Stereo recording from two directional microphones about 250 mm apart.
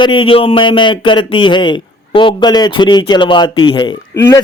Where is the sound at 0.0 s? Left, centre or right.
Centre.